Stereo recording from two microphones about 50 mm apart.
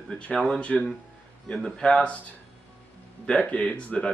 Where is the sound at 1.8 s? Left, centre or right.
Left.